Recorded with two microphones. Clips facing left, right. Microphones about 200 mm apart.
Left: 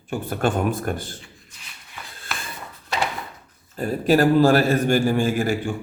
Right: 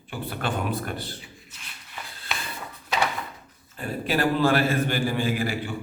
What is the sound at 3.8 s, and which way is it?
A man's voice, 40° left (ahead or behind).